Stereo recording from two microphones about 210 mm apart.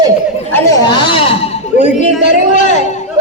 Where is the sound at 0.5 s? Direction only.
15° left (ahead or behind).